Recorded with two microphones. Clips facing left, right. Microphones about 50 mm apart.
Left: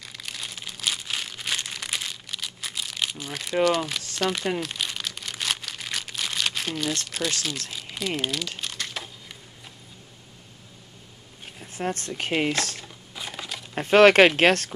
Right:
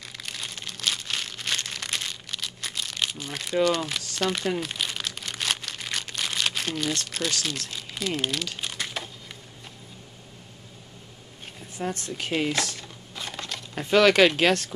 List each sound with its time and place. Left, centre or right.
0.0 s crumpling: centre
3.6 s speech: centre
4.6 s crumpling: centre
7.7 s a sound: centre
8.2 s crumpling: centre
11.7 s speech: left
12.8 s crumpling: centre
13.7 s speech: left